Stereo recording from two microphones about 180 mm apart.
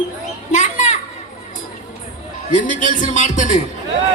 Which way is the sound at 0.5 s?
40° left (ahead or behind).